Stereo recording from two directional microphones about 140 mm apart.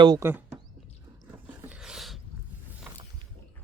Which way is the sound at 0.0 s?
30° right (ahead or behind).